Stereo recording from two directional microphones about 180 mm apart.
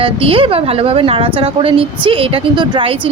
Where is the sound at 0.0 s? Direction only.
30° right (ahead or behind).